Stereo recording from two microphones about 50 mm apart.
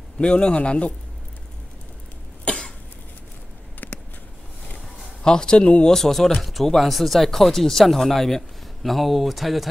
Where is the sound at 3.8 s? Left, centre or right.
Left.